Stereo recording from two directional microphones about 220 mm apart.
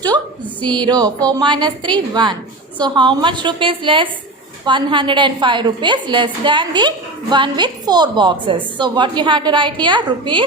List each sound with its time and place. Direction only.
0.8 s music: 20° right (ahead or behind)
1.3 s a woman's voice: 20° right (ahead or behind)